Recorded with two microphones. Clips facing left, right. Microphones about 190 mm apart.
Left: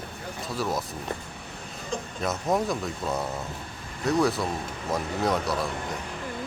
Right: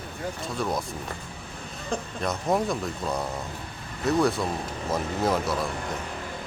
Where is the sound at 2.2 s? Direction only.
Centre (ahead or behind).